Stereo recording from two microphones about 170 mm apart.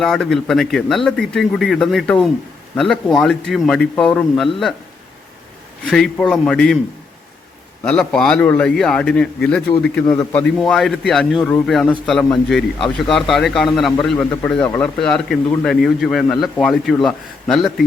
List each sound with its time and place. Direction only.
0.0 s a man's voice: centre (ahead or behind)
5.8 s a man's voice: 5° left (ahead or behind)
7.9 s a man's voice: 5° left (ahead or behind)